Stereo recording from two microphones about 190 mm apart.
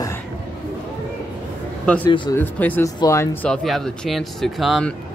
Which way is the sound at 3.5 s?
Centre (ahead or behind).